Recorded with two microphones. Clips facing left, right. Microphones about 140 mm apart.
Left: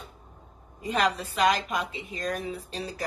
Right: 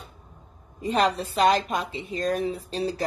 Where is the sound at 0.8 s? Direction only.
30° right (ahead or behind).